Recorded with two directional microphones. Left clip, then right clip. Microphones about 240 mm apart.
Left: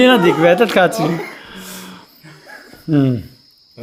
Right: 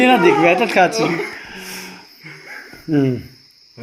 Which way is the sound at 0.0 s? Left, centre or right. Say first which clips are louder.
Left 1 dB; left.